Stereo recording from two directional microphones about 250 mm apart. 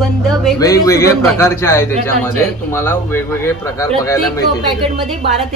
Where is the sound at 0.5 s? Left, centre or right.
Centre.